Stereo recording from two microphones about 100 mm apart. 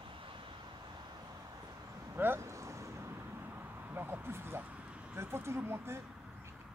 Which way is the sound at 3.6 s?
20° right (ahead or behind).